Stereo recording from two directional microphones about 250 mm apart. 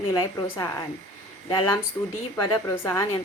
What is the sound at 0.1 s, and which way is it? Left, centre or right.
A woman's voice, centre.